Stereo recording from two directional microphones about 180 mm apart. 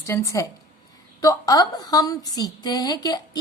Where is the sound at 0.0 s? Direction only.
15° left (ahead or behind).